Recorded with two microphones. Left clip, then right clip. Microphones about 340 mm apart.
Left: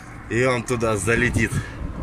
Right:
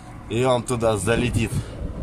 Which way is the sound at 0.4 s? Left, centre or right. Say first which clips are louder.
Right 1 dB; centre.